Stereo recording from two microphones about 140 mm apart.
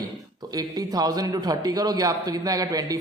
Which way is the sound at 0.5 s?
30° right (ahead or behind).